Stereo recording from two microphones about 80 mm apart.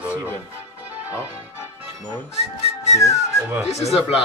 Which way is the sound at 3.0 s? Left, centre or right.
Left.